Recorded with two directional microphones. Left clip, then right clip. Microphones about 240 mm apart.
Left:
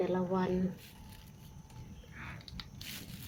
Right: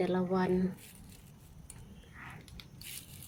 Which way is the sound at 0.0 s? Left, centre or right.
Centre.